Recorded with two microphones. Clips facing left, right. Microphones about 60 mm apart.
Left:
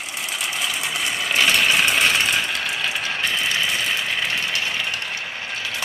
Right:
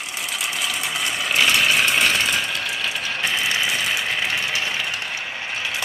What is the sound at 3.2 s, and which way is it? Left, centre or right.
Engine, centre.